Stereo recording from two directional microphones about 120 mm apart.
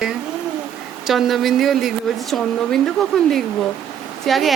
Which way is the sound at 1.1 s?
Centre (ahead or behind).